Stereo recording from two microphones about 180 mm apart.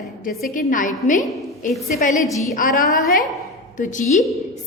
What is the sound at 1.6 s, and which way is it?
Speech, 45° left (ahead or behind).